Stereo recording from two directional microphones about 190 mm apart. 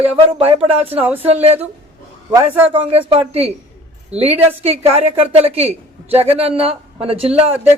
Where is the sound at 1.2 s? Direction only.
30° right (ahead or behind).